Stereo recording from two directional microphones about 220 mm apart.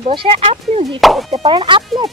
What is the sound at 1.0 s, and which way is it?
Speech, centre (ahead or behind).